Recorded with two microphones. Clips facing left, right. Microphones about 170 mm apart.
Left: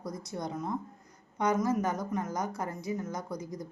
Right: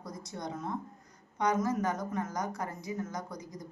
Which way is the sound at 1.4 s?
20° left (ahead or behind).